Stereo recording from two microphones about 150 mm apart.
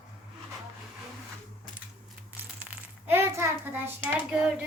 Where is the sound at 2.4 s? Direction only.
10° right (ahead or behind).